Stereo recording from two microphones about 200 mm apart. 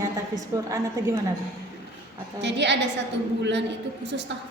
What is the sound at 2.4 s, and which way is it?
Music, 60° right (ahead or behind).